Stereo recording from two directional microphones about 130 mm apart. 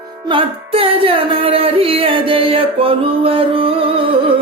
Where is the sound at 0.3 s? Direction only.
45° right (ahead or behind).